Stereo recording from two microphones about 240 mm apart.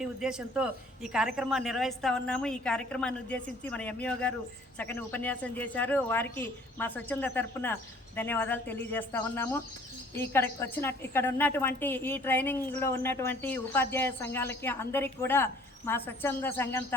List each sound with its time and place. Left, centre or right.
0.0 s a woman's voice: centre